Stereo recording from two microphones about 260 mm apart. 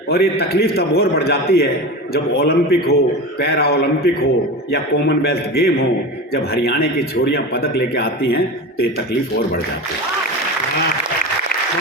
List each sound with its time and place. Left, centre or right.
0.1 s speech: left